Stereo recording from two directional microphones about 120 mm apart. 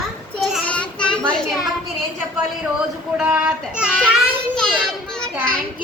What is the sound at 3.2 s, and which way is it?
Child singing, 10° right (ahead or behind).